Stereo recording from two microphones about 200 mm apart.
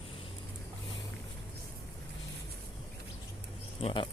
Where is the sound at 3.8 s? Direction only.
25° left (ahead or behind).